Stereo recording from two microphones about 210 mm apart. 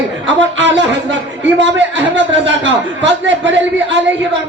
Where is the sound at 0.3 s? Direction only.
60° right (ahead or behind).